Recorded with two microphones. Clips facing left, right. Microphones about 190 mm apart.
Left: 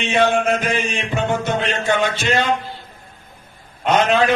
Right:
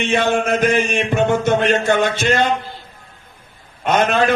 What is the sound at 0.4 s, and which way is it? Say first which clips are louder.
A man's voice: right 3 dB; 55° right (ahead or behind).